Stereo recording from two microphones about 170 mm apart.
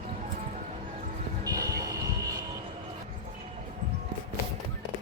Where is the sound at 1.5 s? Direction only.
20° right (ahead or behind).